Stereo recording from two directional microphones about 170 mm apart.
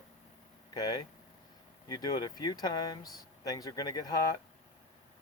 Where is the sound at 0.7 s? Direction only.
25° left (ahead or behind).